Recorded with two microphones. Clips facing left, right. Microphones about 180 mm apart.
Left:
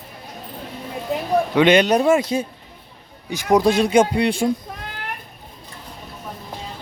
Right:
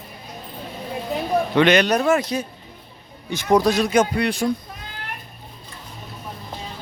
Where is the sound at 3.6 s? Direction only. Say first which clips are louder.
Left 3 dB; 25° left (ahead or behind).